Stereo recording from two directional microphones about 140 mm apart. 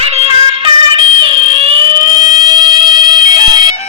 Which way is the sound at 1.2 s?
40° right (ahead or behind).